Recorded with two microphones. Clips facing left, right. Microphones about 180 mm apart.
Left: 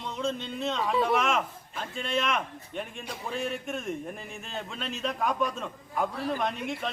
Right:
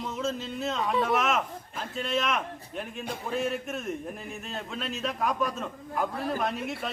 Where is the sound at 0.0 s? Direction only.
5° right (ahead or behind).